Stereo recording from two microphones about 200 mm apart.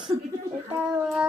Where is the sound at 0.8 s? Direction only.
5° right (ahead or behind).